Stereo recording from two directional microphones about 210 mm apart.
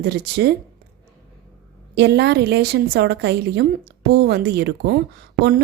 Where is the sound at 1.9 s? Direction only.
55° right (ahead or behind).